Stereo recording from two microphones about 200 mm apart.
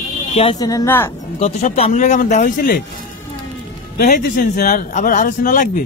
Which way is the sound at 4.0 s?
45° left (ahead or behind).